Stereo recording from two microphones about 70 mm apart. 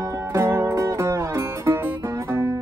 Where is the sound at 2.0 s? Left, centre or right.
Right.